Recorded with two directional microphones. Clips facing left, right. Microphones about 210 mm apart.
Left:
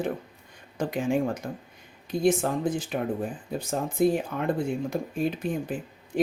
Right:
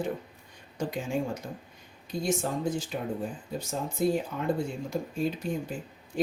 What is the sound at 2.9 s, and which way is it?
Speech, 65° left (ahead or behind).